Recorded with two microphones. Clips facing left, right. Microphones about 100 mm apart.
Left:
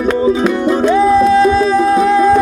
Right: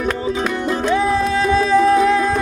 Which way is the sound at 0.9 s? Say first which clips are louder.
Left 8 dB; 35° left (ahead or behind).